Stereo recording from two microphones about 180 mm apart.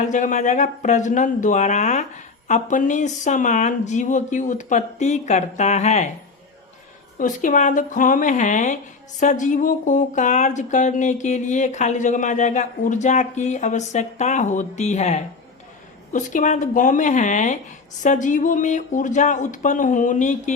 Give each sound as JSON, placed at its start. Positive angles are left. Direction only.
{"t": 0.1, "sound": "speech", "side_deg": 45}
{"t": 7.2, "sound": "speech", "side_deg": 45}